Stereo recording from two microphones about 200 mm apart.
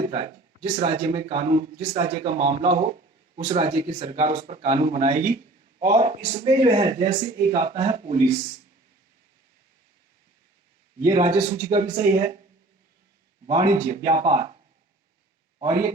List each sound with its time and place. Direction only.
0.6 s speech: 30° right (ahead or behind)
7.7 s speech: 25° right (ahead or behind)
11.0 s speech: 35° right (ahead or behind)
13.5 s a man's voice: 25° right (ahead or behind)